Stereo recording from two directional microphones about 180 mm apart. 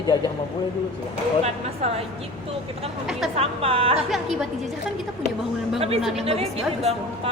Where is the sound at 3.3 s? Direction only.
35° right (ahead or behind).